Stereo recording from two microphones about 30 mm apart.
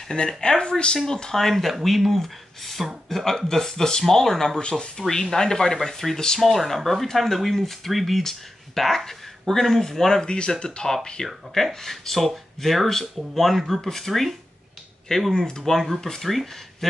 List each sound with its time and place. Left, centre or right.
0.4 s speech: left
0.9 s speech: centre
1.3 s speech: centre
4.6 s speech: left
4.9 s speech: centre
6.1 s speech: left
6.4 s speech: centre
10.2 s speech: left
11.2 s speech: centre
13.7 s speech: centre
15.1 s speech: centre